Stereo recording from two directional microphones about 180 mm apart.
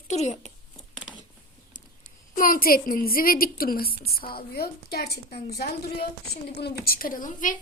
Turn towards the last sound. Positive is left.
turn(degrees=45)  # may be behind; listen again after turning